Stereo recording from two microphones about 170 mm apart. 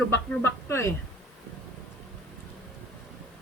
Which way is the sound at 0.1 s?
15° left (ahead or behind).